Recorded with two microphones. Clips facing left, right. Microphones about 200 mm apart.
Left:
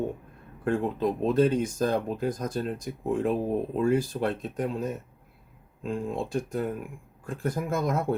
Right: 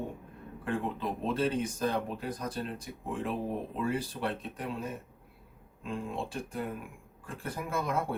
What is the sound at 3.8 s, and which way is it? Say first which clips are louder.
Speech: left 7 dB; 45° left (ahead or behind).